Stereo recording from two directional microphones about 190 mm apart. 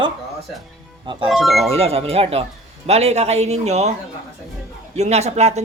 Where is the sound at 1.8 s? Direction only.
30° right (ahead or behind).